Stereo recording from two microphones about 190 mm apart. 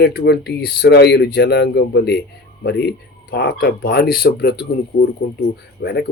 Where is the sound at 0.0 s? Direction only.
60° left (ahead or behind).